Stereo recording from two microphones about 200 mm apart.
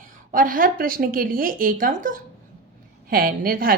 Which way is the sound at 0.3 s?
40° right (ahead or behind).